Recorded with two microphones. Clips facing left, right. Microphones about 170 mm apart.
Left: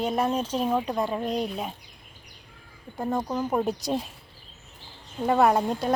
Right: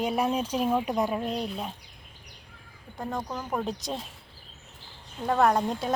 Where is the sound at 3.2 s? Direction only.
15° left (ahead or behind).